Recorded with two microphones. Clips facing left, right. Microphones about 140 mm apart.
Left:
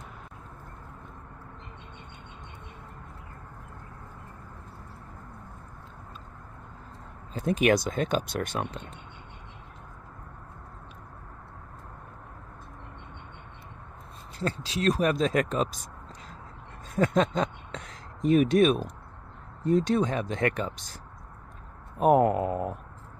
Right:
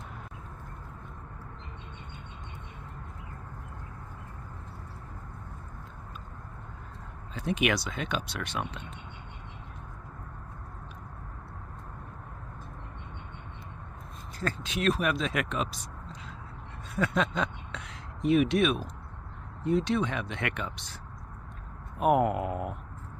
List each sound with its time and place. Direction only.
7.3 s speech: 40° left (ahead or behind)
14.4 s speech: 30° left (ahead or behind)
16.9 s a sound: 40° left (ahead or behind)
19.6 s speech: 45° left (ahead or behind)
21.9 s speech: 35° left (ahead or behind)